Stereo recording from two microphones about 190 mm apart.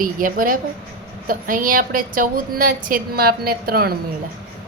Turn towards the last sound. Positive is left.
turn(degrees=-55)  # may be behind; listen again after turning